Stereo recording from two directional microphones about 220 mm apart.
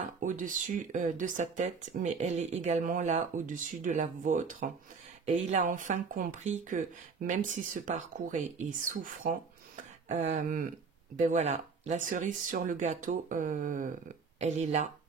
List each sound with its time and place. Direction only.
0.0 s speech: 35° right (ahead or behind)